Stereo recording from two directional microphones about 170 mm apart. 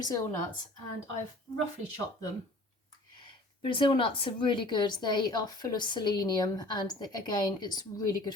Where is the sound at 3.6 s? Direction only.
30° left (ahead or behind).